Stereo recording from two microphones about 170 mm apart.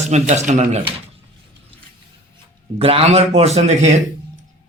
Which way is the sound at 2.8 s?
35° right (ahead or behind).